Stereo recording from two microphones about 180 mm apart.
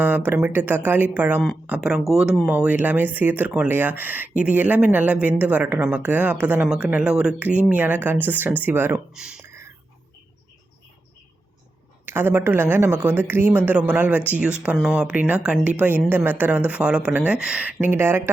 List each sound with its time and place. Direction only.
0.0 s speech: 10° right (ahead or behind)
9.4 s whispering: 15° right (ahead or behind)
12.0 s speech: 10° right (ahead or behind)